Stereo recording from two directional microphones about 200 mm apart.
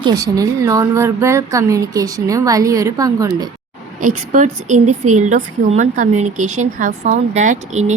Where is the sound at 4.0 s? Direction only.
40° right (ahead or behind).